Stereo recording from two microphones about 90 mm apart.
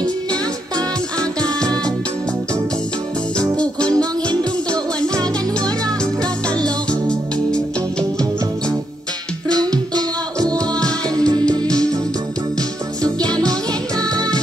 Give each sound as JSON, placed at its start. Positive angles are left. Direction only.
{"t": 0.0, "sound": "music", "side_deg": -50}
{"t": 3.9, "sound": "music", "side_deg": -50}
{"t": 6.6, "sound": "music", "side_deg": 10}
{"t": 9.5, "sound": "music", "side_deg": -45}
{"t": 13.0, "sound": "music", "side_deg": -45}